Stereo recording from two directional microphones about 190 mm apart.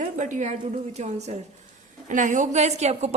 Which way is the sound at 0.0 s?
40° right (ahead or behind).